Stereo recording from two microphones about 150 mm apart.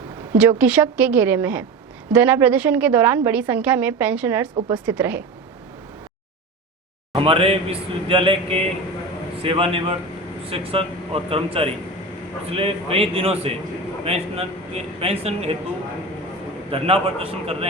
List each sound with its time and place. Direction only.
0.2 s a woman's voice: 10° right (ahead or behind)
7.2 s a man's voice: 35° right (ahead or behind)
16.7 s a man's voice: 40° right (ahead or behind)